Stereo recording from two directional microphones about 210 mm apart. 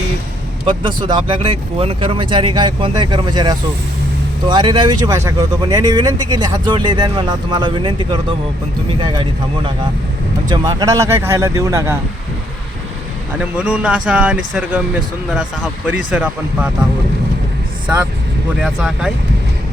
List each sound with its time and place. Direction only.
0.6 s speech: 25° right (ahead or behind)
10.5 s speech: 20° right (ahead or behind)
13.4 s speech: 5° right (ahead or behind)
16.1 s speech: 5° right (ahead or behind)
18.6 s speech: centre (ahead or behind)